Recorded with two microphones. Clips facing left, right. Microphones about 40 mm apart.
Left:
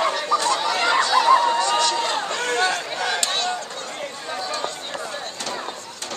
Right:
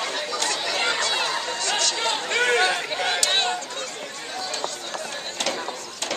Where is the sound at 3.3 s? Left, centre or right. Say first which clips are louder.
Right 1 dB; right.